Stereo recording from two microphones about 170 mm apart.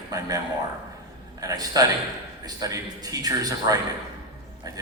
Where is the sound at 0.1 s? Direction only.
25° right (ahead or behind).